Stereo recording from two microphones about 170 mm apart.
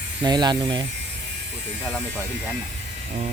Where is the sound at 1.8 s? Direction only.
5° right (ahead or behind).